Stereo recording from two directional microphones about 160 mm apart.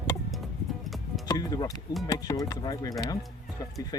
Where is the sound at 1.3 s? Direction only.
25° left (ahead or behind).